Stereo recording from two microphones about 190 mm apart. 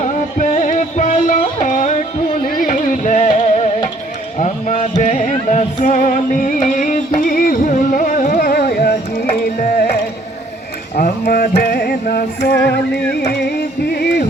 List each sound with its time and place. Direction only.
0.0 s music: 40° left (ahead or behind)
2.5 s carnatic music: 45° left (ahead or behind)
4.4 s music: 40° left (ahead or behind)
9.3 s carnatic music: 50° left (ahead or behind)
10.9 s a sound: 45° left (ahead or behind)
12.5 s music: 60° left (ahead or behind)